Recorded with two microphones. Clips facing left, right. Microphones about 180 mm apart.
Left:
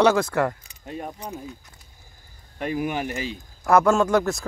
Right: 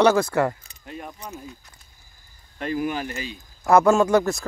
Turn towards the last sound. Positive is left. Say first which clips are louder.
# right 2 dB
turn(degrees=-5)  # may be behind; listen again after turning